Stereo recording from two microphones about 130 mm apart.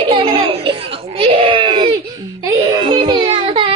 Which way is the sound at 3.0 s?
35° right (ahead or behind).